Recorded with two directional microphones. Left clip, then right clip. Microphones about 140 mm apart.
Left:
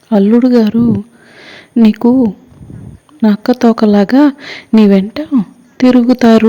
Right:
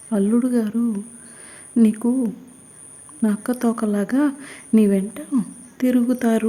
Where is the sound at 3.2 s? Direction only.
35° left (ahead or behind).